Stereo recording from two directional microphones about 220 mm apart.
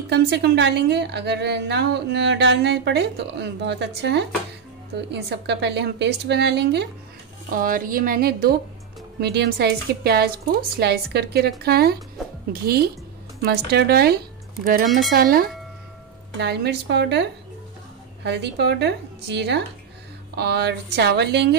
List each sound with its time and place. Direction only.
0.1 s a woman's voice: 50° right (ahead or behind)
13.4 s a woman's voice: 45° right (ahead or behind)